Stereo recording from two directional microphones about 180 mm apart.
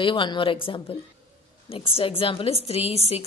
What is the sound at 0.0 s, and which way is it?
A woman's voice, 25° left (ahead or behind).